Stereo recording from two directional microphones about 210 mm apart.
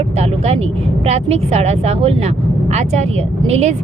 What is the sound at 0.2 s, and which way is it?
Speech, 30° right (ahead or behind).